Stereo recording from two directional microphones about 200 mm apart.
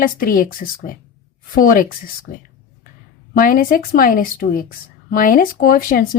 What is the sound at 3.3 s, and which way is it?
Speech, 45° left (ahead or behind).